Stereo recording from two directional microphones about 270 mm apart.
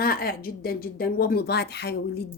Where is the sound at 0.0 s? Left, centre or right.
Left.